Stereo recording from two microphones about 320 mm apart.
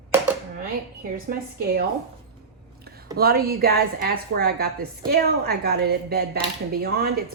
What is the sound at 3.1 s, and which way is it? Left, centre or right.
A woman's voice, right.